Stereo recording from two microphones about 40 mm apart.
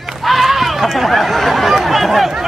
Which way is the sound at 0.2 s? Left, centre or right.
Centre.